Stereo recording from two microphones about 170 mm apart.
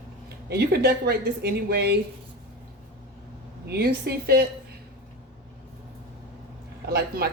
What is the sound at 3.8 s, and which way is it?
Speech, 65° right (ahead or behind).